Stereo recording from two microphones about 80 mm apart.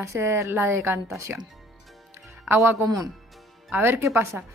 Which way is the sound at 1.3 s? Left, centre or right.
Right.